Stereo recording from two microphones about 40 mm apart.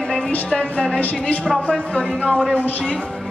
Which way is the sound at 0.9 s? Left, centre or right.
Left.